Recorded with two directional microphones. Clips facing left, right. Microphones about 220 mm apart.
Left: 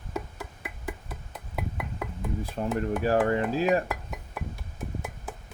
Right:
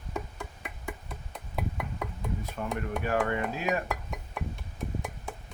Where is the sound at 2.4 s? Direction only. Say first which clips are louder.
Left 7 dB; 30° left (ahead or behind).